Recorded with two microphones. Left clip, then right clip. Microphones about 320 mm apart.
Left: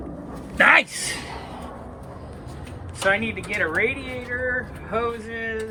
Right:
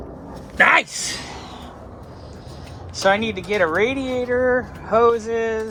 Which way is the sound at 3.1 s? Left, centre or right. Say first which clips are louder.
Right 4 dB; centre.